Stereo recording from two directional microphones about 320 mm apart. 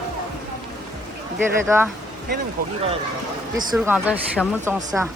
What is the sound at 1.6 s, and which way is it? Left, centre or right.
Speech, centre.